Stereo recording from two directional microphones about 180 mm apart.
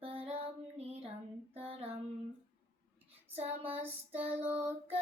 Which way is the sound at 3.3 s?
35° right (ahead or behind).